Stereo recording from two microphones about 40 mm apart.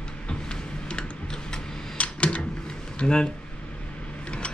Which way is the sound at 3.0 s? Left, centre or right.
Left.